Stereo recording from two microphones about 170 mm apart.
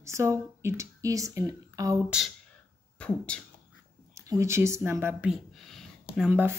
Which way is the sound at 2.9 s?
5° left (ahead or behind).